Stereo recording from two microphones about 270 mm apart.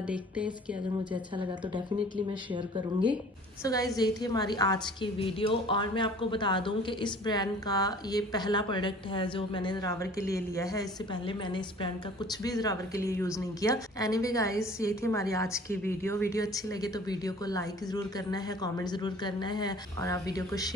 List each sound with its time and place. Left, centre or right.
3.6 s a woman's voice: centre